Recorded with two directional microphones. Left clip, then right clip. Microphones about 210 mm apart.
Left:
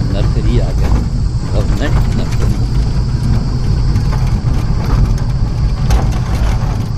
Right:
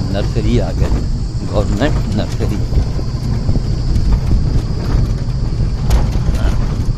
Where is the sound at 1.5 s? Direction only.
30° right (ahead or behind).